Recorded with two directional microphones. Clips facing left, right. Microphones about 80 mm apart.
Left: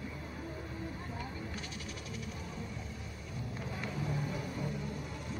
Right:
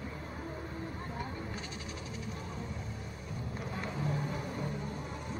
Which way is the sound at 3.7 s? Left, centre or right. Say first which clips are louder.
Right 2 dB; right.